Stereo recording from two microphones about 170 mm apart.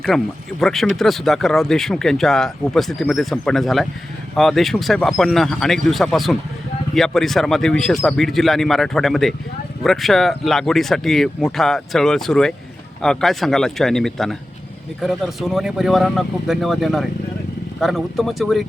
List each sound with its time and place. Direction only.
0.1 s speech: 5° left (ahead or behind)